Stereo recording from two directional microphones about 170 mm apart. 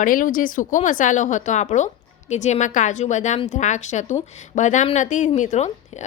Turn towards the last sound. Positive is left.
turn(degrees=40)  # may be behind; listen again after turning